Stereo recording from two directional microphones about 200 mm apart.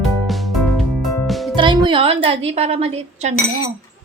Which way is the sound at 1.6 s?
25° right (ahead or behind).